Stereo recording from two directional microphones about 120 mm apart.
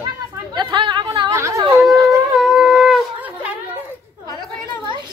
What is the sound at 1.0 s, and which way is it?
Speech, 30° right (ahead or behind).